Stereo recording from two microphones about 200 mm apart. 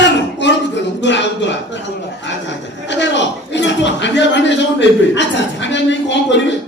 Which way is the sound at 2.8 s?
65° left (ahead or behind).